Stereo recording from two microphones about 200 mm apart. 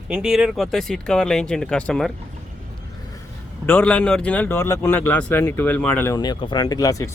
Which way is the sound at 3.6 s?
10° left (ahead or behind).